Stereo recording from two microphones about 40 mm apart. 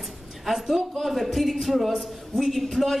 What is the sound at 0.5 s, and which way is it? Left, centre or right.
A woman's voice, centre.